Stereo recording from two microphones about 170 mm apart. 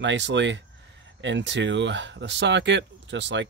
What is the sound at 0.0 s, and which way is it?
Speech, 90° right.